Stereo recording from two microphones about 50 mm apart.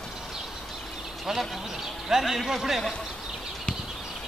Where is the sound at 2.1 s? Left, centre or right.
Centre.